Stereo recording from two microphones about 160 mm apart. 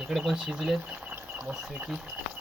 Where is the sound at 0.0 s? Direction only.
Centre (ahead or behind).